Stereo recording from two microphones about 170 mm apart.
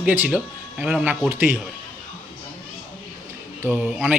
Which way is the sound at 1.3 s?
15° right (ahead or behind).